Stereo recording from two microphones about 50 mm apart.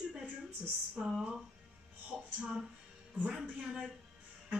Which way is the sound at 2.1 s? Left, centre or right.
Centre.